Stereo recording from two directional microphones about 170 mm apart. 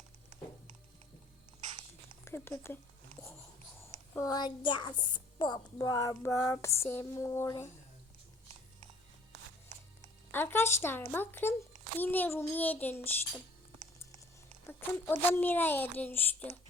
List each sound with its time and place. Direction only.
2.2 s speech: 15° left (ahead or behind)
4.2 s a woman's voice: 25° left (ahead or behind)
10.3 s speech: 15° left (ahead or behind)
14.7 s speech: 15° left (ahead or behind)